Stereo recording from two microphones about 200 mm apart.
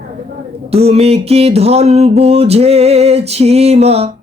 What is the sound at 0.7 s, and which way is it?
Music, 30° right (ahead or behind).